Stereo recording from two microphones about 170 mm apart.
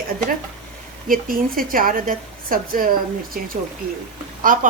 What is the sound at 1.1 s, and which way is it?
A woman's voice, 55° right (ahead or behind).